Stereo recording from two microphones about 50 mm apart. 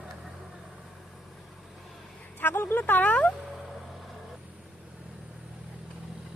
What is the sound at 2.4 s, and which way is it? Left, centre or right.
Speech, left.